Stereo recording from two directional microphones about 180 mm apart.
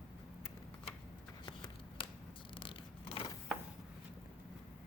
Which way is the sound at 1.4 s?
30° left (ahead or behind).